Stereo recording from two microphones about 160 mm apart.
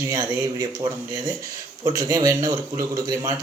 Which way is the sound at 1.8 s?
20° right (ahead or behind).